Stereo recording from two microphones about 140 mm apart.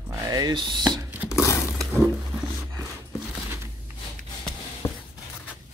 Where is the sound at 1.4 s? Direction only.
20° left (ahead or behind).